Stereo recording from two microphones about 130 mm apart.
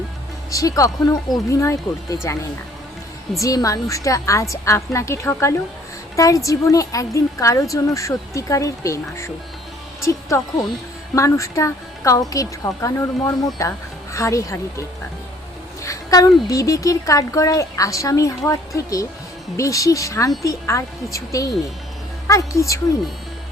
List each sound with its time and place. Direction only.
0.5 s speech: 25° left (ahead or behind)